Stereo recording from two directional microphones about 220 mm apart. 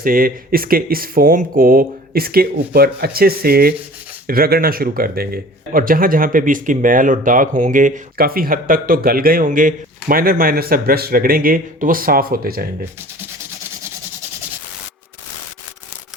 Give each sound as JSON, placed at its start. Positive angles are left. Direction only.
{"t": 0.0, "sound": "speech", "side_deg": -40}